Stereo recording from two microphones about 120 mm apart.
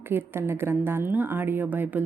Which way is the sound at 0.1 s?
20° right (ahead or behind).